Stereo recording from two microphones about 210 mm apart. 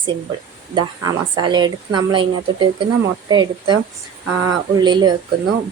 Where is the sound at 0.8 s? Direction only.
20° right (ahead or behind).